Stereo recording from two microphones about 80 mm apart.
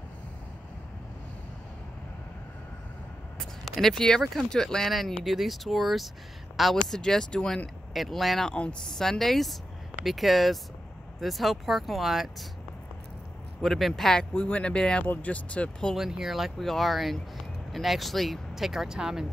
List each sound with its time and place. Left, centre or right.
3.3 s speech: centre
13.6 s speech: centre
14.3 s speech: centre
15.9 s speech: centre